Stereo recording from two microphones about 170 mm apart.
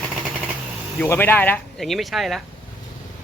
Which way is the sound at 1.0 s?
10° left (ahead or behind).